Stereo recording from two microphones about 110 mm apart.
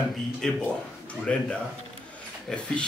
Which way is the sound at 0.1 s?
5° left (ahead or behind).